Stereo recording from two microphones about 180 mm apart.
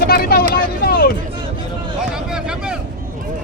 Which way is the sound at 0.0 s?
60° left (ahead or behind).